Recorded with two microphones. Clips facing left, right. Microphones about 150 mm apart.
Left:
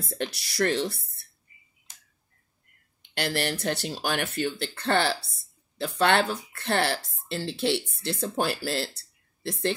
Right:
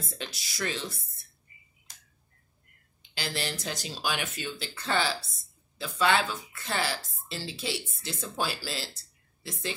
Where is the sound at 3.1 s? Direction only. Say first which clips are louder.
Left 6 dB; 60° left (ahead or behind).